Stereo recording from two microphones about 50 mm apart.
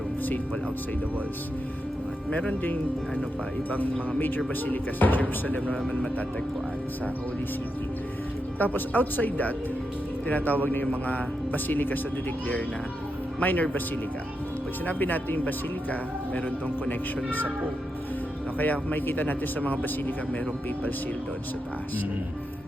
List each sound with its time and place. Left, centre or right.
4.6 s speech: left
8.5 s speech: left
13.4 s speech: left
14.8 s speech: left
18.6 s speech: left